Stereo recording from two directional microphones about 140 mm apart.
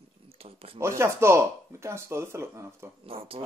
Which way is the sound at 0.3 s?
45° right (ahead or behind).